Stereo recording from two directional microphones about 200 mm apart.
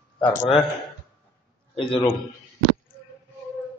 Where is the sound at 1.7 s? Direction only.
25° left (ahead or behind).